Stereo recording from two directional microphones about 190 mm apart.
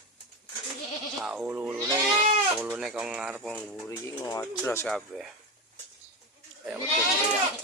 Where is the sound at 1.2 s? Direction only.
5° right (ahead or behind).